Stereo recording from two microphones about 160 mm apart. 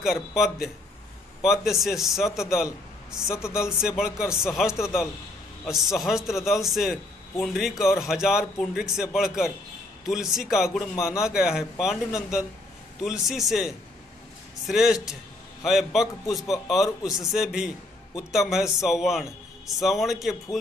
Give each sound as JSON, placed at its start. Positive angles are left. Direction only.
{"t": 0.0, "sound": "a man's voice", "side_deg": 0}
{"t": 3.3, "sound": "speech", "side_deg": 15}
{"t": 3.8, "sound": "a man's voice", "side_deg": -5}
{"t": 5.9, "sound": "a man's voice", "side_deg": 0}